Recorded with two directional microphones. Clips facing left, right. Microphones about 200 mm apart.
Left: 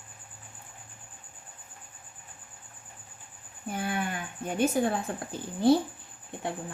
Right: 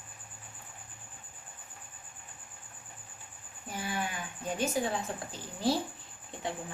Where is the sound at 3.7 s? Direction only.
55° left (ahead or behind).